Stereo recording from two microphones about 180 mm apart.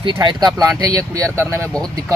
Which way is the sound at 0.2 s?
20° right (ahead or behind).